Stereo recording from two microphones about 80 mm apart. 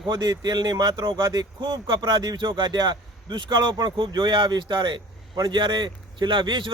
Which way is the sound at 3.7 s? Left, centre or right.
Right.